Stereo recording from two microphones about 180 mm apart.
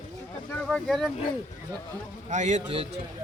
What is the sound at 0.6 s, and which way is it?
Speech, centre (ahead or behind).